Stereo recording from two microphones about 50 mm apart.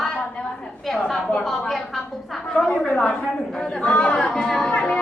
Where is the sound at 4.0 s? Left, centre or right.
Centre.